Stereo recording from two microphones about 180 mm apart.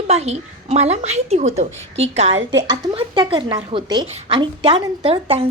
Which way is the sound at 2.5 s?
25° right (ahead or behind).